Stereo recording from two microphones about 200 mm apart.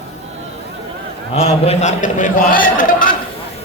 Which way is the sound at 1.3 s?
30° left (ahead or behind).